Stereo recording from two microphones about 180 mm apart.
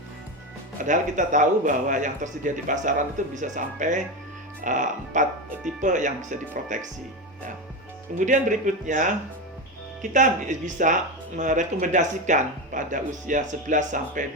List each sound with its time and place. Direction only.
0.9 s speech: 45° right (ahead or behind)
8.2 s speech: 45° right (ahead or behind)